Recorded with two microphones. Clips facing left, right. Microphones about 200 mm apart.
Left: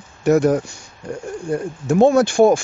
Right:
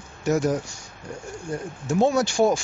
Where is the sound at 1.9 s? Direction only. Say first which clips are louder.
Left 7 dB; 55° left (ahead or behind).